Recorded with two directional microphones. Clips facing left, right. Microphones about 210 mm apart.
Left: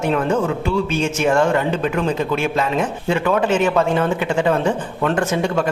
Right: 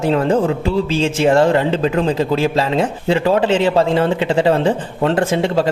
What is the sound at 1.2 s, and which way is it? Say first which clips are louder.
A man's voice: right 4 dB; 35° right (ahead or behind).